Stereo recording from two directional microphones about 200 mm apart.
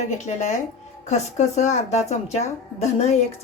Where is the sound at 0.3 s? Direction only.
35° left (ahead or behind).